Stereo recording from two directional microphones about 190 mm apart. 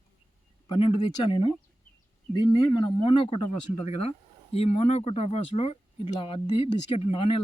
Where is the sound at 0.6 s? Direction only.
25° left (ahead or behind).